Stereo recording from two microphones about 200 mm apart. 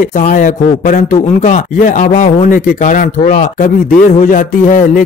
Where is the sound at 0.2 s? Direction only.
40° left (ahead or behind).